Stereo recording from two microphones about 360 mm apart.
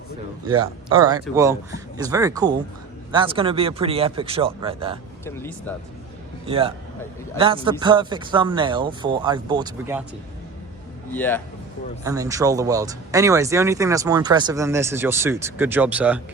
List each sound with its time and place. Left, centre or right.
0.9 s speech: centre
5.2 s speech: centre
6.4 s a man's voice: centre
11.1 s speech: centre
12.0 s speech: centre